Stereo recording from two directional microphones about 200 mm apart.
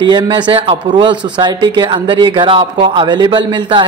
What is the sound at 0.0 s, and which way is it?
Speech, 20° right (ahead or behind).